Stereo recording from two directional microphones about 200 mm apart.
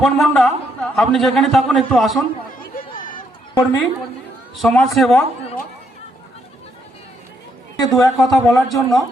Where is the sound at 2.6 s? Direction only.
45° left (ahead or behind).